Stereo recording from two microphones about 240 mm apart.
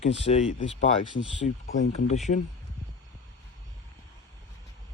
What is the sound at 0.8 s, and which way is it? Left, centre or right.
Speech, left.